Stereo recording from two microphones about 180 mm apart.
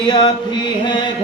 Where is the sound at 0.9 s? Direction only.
25° left (ahead or behind).